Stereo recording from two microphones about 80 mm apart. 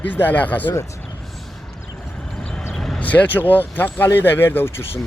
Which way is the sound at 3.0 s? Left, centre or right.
Centre.